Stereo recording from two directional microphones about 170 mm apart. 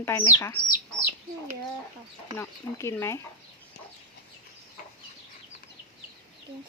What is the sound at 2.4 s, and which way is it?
Speech, 15° left (ahead or behind).